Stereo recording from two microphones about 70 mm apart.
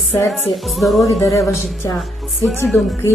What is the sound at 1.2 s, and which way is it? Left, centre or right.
Speech, left.